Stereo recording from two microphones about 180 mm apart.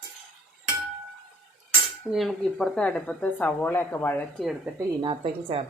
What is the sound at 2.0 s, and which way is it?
Speech, centre (ahead or behind).